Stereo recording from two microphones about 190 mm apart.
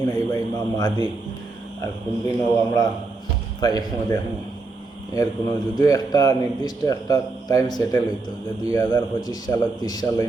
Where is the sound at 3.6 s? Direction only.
20° left (ahead or behind).